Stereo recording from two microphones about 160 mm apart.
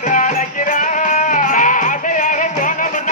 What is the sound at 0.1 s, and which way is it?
Music, 55° left (ahead or behind).